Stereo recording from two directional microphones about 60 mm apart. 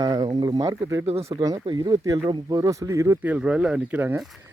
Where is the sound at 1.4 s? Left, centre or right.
Right.